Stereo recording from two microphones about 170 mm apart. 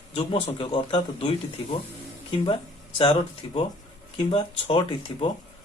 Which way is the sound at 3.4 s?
30° left (ahead or behind).